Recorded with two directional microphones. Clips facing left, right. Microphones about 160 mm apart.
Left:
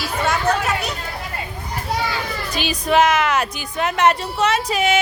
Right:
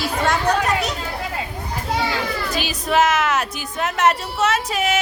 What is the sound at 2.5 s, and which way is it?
Speech, centre (ahead or behind).